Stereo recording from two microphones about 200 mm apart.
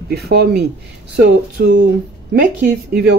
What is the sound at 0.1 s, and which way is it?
Speech, 55° right (ahead or behind).